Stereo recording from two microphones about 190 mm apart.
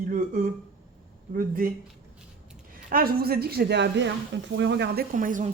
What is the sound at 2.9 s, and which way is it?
Speech, 50° right (ahead or behind).